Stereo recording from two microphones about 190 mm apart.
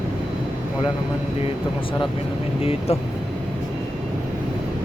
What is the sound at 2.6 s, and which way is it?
Speech, 30° left (ahead or behind).